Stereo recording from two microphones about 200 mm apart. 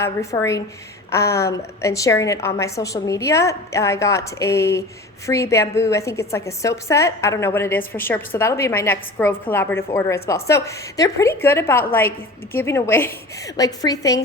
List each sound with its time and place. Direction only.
0.0 s a woman's voice: 15° left (ahead or behind)